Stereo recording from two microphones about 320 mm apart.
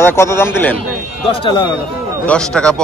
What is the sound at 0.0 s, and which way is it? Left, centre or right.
A man's voice, centre.